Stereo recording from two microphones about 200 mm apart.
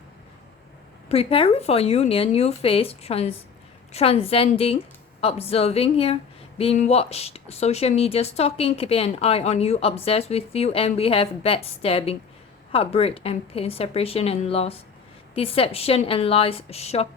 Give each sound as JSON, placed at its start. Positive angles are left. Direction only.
{"t": 1.0, "sound": "a woman's voice", "side_deg": 30}